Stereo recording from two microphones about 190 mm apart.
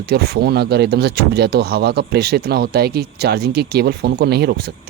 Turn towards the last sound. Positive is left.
turn(degrees=-55)  # may be behind; listen again after turning